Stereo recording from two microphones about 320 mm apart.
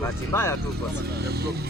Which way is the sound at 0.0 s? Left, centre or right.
Centre.